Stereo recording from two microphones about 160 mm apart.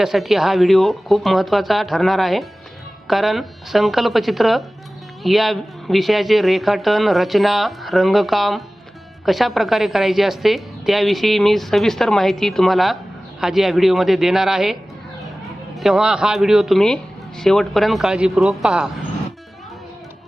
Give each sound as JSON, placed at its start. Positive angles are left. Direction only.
{"t": 0.0, "sound": "a woman's voice", "side_deg": 0}